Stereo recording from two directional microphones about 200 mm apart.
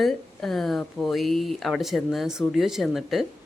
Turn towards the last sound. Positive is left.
turn(degrees=0)  # may be behind; listen again after turning